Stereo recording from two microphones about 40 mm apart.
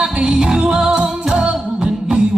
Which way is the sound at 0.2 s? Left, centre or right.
Centre.